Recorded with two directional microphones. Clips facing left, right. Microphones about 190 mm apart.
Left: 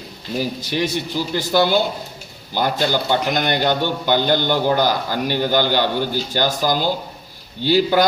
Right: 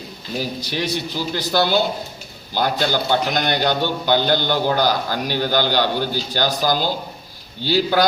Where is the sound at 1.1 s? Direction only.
15° left (ahead or behind).